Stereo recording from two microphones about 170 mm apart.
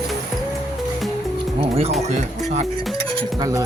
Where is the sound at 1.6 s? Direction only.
35° right (ahead or behind).